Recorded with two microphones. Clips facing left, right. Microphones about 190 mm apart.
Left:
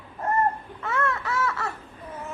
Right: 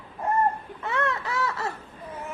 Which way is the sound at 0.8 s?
15° right (ahead or behind).